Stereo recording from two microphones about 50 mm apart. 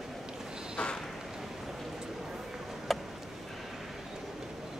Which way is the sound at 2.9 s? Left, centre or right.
Centre.